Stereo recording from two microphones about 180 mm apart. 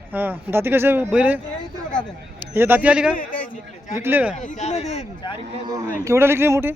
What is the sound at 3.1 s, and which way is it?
Speech, 50° left (ahead or behind).